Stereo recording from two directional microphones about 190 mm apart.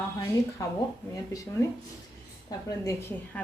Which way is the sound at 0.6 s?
15° left (ahead or behind).